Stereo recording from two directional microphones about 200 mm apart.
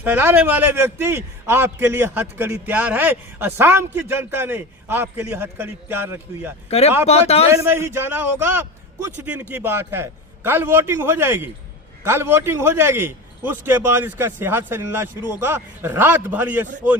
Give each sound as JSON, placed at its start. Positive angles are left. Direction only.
{"t": 0.0, "sound": "a man's voice", "side_deg": -10}
{"t": 6.7, "sound": "speech", "side_deg": 30}
{"t": 7.5, "sound": "a man's voice", "side_deg": -15}